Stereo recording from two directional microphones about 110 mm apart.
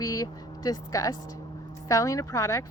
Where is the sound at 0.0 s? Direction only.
30° left (ahead or behind).